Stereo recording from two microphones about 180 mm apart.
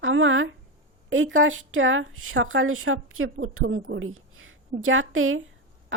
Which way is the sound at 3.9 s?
90° right.